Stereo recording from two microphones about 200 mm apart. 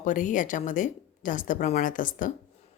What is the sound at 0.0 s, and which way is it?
A woman's voice, 40° left (ahead or behind).